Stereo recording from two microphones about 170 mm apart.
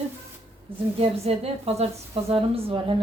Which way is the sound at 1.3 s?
35° right (ahead or behind).